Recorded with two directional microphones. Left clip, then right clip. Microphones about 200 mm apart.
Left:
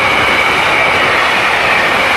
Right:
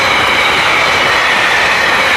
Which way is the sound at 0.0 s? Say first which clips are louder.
Even; 45° left (ahead or behind).